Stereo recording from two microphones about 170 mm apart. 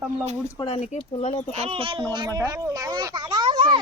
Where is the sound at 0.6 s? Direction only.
30° left (ahead or behind).